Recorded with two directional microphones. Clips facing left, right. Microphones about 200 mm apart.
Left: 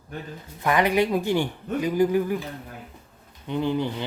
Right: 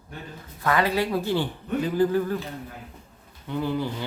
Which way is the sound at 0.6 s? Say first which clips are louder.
Left 2 dB; 15° left (ahead or behind).